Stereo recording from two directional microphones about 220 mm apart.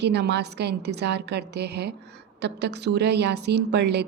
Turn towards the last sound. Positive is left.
turn(degrees=-50)  # may be behind; listen again after turning